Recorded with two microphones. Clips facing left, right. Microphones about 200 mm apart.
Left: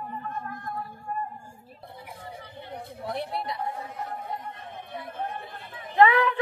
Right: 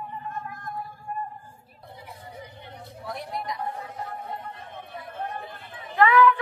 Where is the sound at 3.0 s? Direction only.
30° left (ahead or behind).